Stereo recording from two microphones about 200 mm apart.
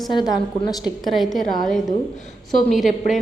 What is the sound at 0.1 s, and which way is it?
Speech, 20° left (ahead or behind).